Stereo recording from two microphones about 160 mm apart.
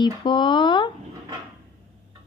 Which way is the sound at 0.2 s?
30° left (ahead or behind).